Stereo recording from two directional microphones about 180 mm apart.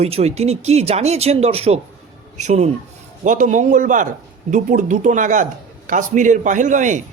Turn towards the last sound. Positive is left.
turn(degrees=-45)  # may be behind; listen again after turning